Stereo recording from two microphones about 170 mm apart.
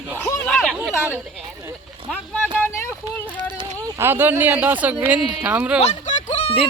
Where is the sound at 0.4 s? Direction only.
5° left (ahead or behind).